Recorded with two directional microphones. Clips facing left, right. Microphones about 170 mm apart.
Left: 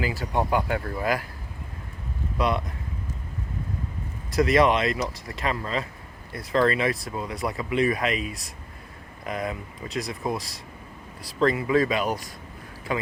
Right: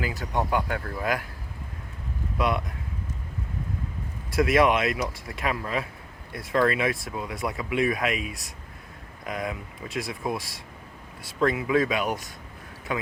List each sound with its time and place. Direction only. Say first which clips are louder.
0.0 s speech: left 2 dB; centre (ahead or behind)
2.4 s speech: left 1 dB; centre (ahead or behind)
4.4 s speech: left 1 dB; 5° right (ahead or behind)